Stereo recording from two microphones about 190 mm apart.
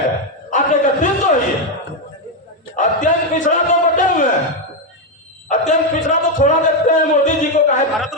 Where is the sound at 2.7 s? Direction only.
40° left (ahead or behind).